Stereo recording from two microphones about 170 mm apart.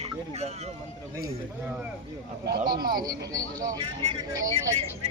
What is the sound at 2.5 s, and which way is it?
Speech, 65° right (ahead or behind).